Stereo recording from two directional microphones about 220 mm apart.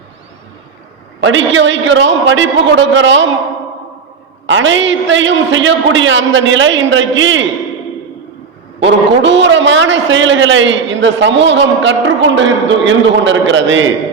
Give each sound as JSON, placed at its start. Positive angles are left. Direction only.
{"t": 1.2, "sound": "a man's voice", "side_deg": -60}
{"t": 4.4, "sound": "a man's voice", "side_deg": -60}
{"t": 8.8, "sound": "a man's voice", "side_deg": -55}